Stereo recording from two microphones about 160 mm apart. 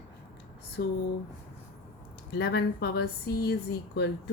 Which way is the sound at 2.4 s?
90° left.